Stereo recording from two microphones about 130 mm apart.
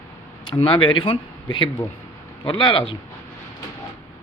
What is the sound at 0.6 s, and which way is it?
Speech, 40° left (ahead or behind).